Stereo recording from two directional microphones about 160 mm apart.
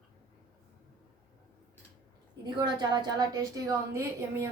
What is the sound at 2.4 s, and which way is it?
A woman's voice, 25° right (ahead or behind).